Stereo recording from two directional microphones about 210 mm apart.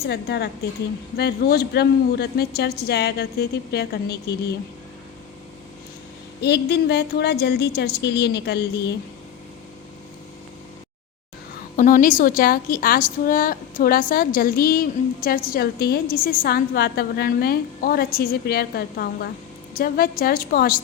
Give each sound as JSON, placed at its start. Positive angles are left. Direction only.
{"t": 0.0, "sound": "a woman's voice", "side_deg": 50}
{"t": 6.4, "sound": "a woman's voice", "side_deg": 55}
{"t": 11.8, "sound": "a woman's voice", "side_deg": 40}